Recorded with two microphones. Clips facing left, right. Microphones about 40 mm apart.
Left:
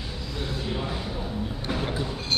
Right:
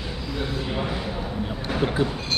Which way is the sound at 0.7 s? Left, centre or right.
Right.